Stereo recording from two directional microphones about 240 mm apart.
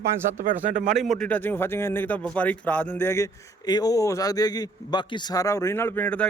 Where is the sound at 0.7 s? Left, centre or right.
Right.